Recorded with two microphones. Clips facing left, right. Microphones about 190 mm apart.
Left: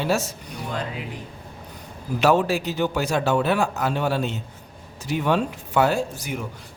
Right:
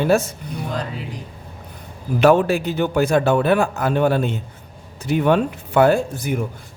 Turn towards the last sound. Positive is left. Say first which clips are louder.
# right 5 dB
turn(degrees=-55)  # may be behind; listen again after turning